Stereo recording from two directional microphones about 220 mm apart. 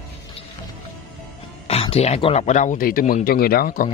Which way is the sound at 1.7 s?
30° left (ahead or behind).